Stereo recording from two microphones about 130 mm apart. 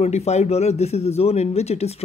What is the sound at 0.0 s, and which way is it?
Speech, 55° left (ahead or behind).